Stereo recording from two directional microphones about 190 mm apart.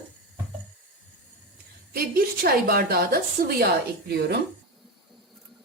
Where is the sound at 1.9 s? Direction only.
50° right (ahead or behind).